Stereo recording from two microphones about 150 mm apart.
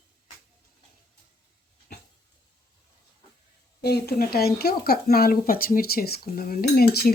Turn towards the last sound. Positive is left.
turn(degrees=90)